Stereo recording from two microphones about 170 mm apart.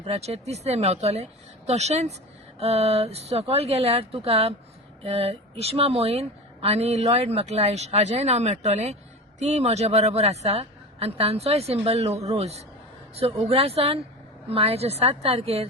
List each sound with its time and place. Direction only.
0.0 s speech: 40° right (ahead or behind)